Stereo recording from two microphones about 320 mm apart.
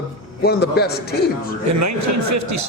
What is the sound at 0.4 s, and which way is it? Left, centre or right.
Speech, left.